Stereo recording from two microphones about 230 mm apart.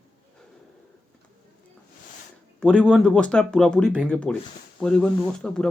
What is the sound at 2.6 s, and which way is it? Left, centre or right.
Speech, centre.